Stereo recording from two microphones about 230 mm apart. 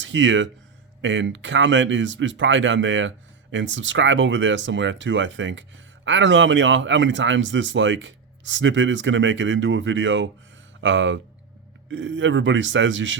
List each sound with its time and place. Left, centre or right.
0.0 s speech: right